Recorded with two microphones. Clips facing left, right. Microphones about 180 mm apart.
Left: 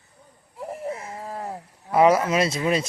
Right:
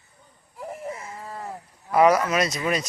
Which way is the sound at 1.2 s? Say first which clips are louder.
Left 3 dB; 30° left (ahead or behind).